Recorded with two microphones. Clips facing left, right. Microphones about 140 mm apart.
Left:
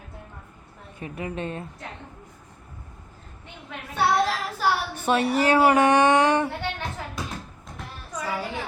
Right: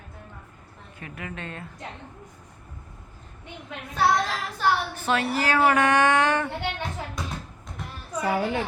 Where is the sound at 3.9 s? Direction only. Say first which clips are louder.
Left 1 dB; 5° left (ahead or behind).